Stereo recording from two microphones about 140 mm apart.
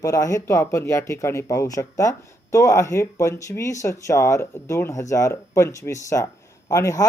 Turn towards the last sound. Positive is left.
turn(degrees=25)  # may be behind; listen again after turning